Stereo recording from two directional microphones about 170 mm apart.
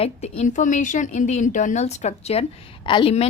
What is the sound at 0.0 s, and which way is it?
A woman's voice, 40° left (ahead or behind).